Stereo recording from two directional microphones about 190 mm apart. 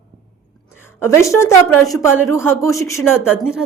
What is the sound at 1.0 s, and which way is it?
A woman's voice, 15° left (ahead or behind).